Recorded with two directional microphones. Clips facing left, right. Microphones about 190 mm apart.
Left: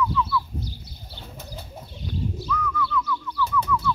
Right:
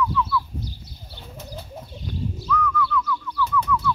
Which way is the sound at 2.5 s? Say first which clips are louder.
Right 4 dB; 5° left (ahead or behind).